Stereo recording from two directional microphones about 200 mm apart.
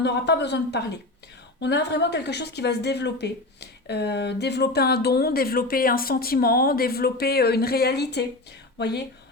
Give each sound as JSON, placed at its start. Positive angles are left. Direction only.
{"t": 0.0, "sound": "a woman's voice", "side_deg": 55}